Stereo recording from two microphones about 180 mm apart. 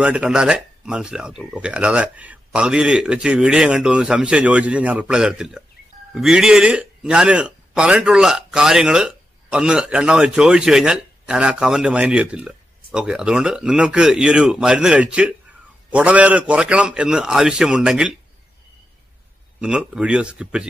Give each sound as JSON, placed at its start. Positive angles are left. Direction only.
{"t": 0.0, "sound": "a man's voice", "side_deg": -5}
{"t": 19.6, "sound": "a man's voice", "side_deg": -5}